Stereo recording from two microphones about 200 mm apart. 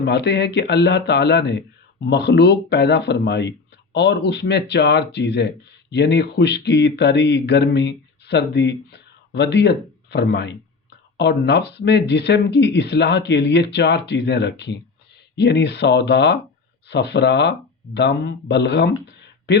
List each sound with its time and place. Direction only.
0.0 s speech: 55° left (ahead or behind)